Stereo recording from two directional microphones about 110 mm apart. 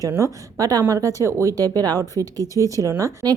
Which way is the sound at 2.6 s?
30° right (ahead or behind).